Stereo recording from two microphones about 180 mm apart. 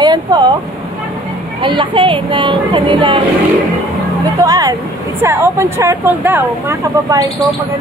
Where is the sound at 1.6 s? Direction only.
25° right (ahead or behind).